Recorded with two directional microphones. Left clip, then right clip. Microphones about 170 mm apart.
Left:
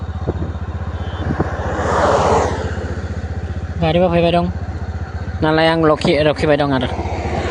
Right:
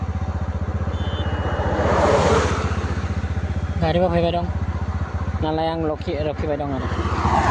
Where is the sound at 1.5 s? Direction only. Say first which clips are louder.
Even; 85° left; by 2.0 s 70° left (ahead or behind).